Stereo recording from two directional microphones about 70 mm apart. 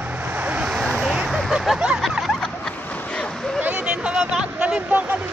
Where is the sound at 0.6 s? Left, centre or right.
Centre.